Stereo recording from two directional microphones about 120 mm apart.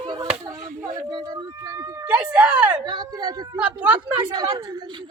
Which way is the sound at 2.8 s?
35° right (ahead or behind).